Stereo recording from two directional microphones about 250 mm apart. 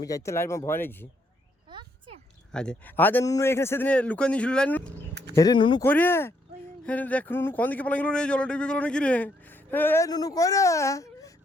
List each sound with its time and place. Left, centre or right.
0.0 s a man's voice: centre
1.7 s a sound: right
2.5 s a man's voice: centre
5.3 s a man's voice: centre
5.8 s a man's voice: centre